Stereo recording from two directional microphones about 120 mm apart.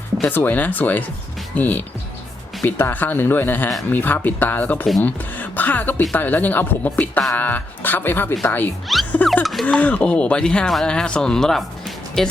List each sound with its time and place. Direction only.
0.2 s speech: 15° left (ahead or behind)
9.2 s speech: centre (ahead or behind)
9.6 s speech: 10° left (ahead or behind)